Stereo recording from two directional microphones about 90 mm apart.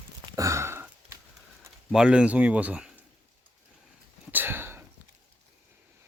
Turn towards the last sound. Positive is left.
turn(degrees=-25)  # may be behind; listen again after turning